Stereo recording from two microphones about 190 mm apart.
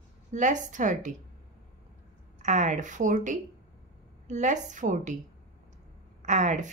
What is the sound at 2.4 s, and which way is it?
A woman's voice, 40° right (ahead or behind).